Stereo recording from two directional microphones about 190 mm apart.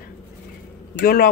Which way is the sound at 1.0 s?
50° left (ahead or behind).